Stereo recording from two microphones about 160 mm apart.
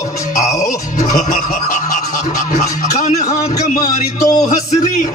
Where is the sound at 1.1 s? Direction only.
50° left (ahead or behind).